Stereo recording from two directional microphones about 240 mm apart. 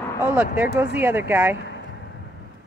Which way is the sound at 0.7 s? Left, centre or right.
Centre.